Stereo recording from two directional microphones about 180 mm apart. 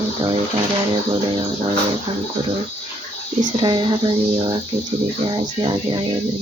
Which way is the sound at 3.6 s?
25° right (ahead or behind).